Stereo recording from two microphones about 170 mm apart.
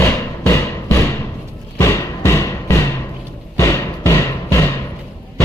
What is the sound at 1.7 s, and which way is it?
Music, 15° left (ahead or behind).